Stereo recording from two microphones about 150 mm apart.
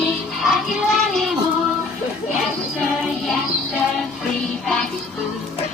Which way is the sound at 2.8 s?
Centre (ahead or behind).